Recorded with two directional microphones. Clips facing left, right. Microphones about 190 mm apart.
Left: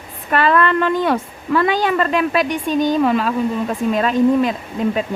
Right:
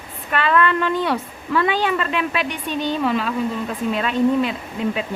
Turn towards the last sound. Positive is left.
turn(degrees=40)  # may be behind; listen again after turning